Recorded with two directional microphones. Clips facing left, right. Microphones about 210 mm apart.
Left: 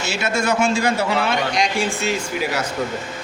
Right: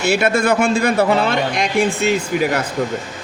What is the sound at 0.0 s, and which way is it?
A man's voice, 55° right (ahead or behind).